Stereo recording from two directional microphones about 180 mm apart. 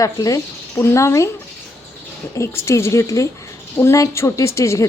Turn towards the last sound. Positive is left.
turn(degrees=15)  # may be behind; listen again after turning